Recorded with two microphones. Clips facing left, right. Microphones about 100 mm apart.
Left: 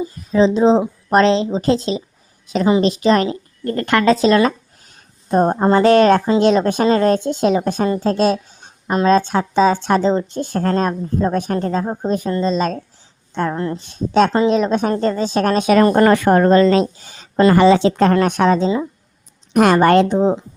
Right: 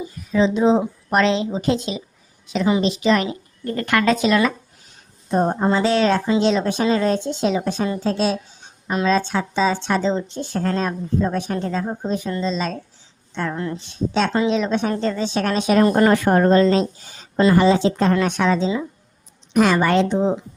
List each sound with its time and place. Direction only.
0.0 s a woman's voice: 35° left (ahead or behind)
3.8 s speech: 30° left (ahead or behind)
5.3 s speech: 50° left (ahead or behind)
15.7 s a woman's voice: 70° left (ahead or behind); by 20.4 s 45° left (ahead or behind)